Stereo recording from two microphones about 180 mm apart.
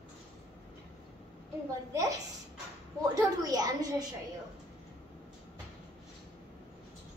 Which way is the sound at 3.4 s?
20° right (ahead or behind).